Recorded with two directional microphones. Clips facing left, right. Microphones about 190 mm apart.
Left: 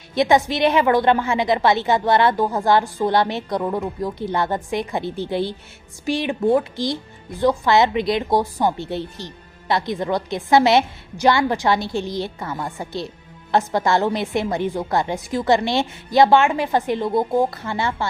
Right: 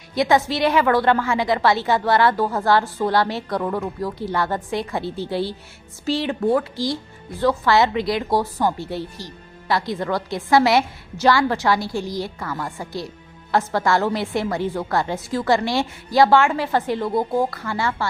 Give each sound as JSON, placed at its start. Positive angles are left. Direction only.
{"t": 0.1, "sound": "speech", "side_deg": 20}